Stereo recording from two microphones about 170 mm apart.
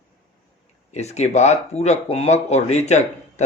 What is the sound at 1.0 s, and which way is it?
Speech, 40° left (ahead or behind).